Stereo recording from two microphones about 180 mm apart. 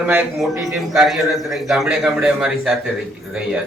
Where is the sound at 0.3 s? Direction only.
Centre (ahead or behind).